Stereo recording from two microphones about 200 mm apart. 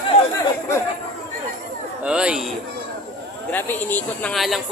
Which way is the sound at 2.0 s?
5° right (ahead or behind).